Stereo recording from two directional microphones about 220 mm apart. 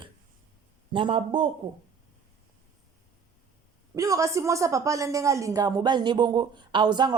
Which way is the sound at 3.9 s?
15° right (ahead or behind).